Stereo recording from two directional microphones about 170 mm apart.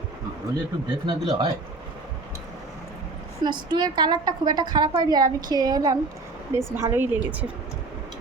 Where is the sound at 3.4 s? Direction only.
25° right (ahead or behind).